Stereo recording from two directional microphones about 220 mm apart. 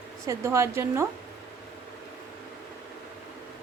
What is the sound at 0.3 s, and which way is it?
Speech, 15° right (ahead or behind).